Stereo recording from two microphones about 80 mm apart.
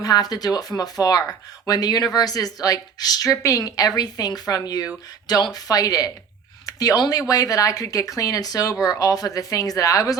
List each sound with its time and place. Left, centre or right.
0.0 s speech: left